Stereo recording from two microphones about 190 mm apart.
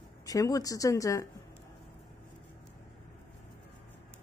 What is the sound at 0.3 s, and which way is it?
Speech, 20° left (ahead or behind).